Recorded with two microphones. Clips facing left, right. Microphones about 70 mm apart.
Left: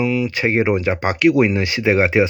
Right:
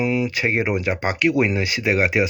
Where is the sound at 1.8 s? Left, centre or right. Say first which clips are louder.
Left 4 dB; left.